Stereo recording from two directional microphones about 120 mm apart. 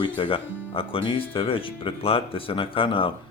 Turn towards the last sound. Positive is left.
turn(degrees=45)  # may be behind; listen again after turning